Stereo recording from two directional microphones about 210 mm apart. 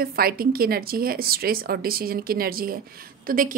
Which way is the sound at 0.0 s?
45° right (ahead or behind).